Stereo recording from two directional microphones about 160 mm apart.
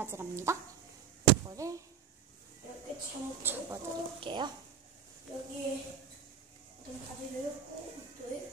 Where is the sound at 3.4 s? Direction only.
15° right (ahead or behind).